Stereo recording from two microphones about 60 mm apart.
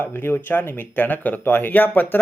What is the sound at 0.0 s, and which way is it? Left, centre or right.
A man's voice, left.